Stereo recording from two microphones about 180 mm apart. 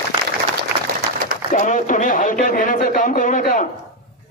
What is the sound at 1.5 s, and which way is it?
Speech, 45° left (ahead or behind).